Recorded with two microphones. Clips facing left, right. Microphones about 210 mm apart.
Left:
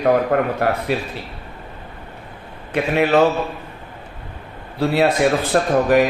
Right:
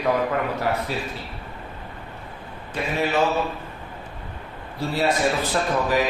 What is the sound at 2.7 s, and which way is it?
Speech, 65° left (ahead or behind).